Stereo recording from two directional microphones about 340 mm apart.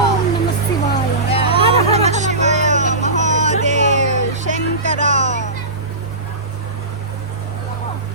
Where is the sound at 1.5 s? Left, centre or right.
Centre.